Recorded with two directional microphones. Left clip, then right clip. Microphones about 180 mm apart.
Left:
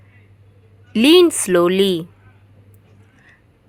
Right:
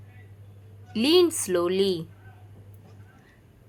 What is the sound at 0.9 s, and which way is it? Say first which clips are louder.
A woman's voice: left 9 dB; 40° left (ahead or behind).